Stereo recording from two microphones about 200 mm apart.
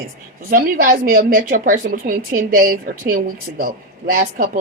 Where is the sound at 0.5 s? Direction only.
45° right (ahead or behind).